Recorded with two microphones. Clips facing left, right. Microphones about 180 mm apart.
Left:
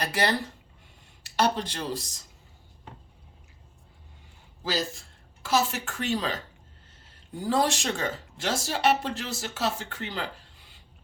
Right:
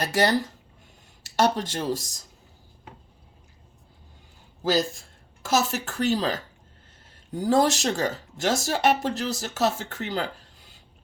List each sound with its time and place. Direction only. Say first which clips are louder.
0.0 s speech: right 4 dB; 45° right (ahead or behind)
5.4 s a woman's voice: right 2 dB; 45° right (ahead or behind)
7.3 s speech: right 4 dB; 45° right (ahead or behind)